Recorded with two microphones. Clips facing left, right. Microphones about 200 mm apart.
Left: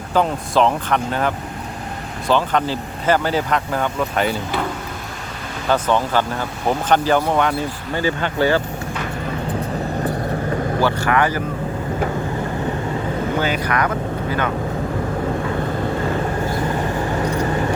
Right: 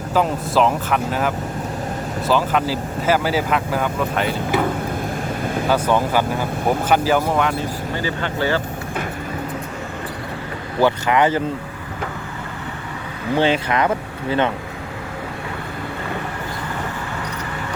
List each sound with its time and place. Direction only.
0.1 s speech: 5° right (ahead or behind)
2.3 s speech: 5° right (ahead or behind)
5.6 s speech: 10° right (ahead or behind)
10.8 s speech: 20° right (ahead or behind)
13.4 s speech: 25° right (ahead or behind)
17.2 s vehicle: 35° left (ahead or behind)